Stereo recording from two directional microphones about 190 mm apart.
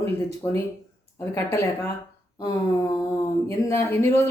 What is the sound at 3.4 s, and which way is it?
Speech, 15° left (ahead or behind).